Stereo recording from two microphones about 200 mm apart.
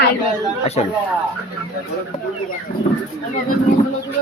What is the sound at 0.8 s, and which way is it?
Speech, 30° left (ahead or behind).